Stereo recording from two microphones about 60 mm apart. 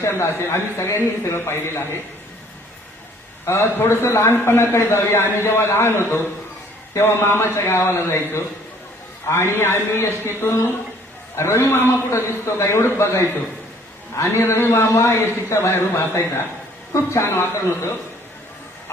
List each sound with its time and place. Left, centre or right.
0.0 s a man's voice: left
3.4 s a man's voice: left
12.1 s a man's voice: left
14.3 s a man's voice: left